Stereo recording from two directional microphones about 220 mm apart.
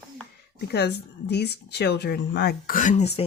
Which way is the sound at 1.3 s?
50° left (ahead or behind).